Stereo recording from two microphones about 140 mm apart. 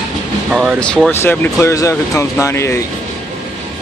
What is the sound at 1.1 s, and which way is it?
Speech, 15° left (ahead or behind).